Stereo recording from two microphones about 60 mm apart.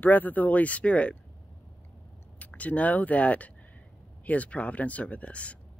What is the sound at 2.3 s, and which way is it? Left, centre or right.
Speech, left.